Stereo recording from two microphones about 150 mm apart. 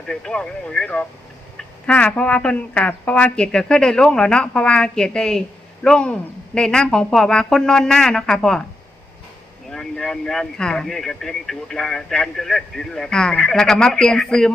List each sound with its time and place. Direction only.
0.1 s speech: 5° left (ahead or behind)
9.6 s speech: 5° left (ahead or behind)